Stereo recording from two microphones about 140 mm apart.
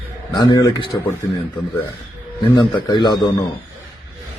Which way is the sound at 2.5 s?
30° left (ahead or behind).